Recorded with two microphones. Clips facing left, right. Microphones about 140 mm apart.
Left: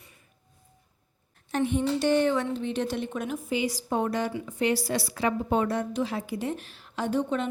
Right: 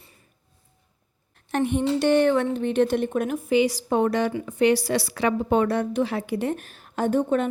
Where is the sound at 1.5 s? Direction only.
60° right (ahead or behind).